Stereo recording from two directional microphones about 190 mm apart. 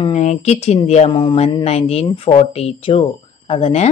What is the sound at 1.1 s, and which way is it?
Speech, 25° left (ahead or behind).